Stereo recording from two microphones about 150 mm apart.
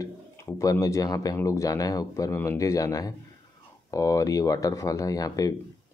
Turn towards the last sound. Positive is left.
turn(degrees=25)  # may be behind; listen again after turning